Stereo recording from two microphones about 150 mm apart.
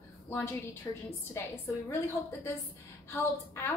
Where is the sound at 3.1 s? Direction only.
15° left (ahead or behind).